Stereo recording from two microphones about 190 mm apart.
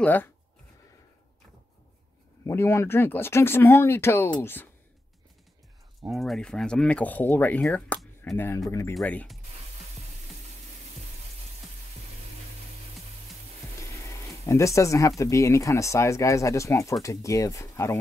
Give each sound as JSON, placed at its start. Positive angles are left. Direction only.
{"t": 0.0, "sound": "speech", "side_deg": 10}
{"t": 2.4, "sound": "speech", "side_deg": 15}
{"t": 6.0, "sound": "speech", "side_deg": 0}
{"t": 8.9, "sound": "speech", "side_deg": 5}
{"t": 13.7, "sound": "speech", "side_deg": 15}